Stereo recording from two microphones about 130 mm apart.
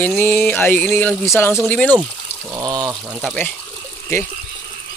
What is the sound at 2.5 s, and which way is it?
Speech, 30° right (ahead or behind).